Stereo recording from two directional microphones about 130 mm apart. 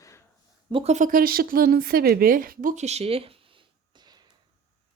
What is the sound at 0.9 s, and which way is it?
Speech, 80° right.